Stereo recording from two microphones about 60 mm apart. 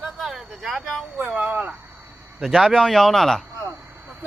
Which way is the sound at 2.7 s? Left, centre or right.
Centre.